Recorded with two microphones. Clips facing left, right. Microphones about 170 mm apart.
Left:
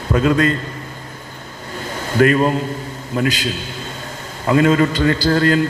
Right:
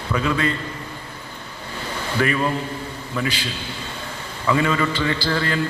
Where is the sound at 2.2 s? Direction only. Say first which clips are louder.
Left 8 dB; 35° left (ahead or behind).